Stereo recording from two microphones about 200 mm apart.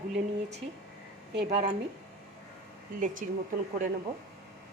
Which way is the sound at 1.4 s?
30° right (ahead or behind).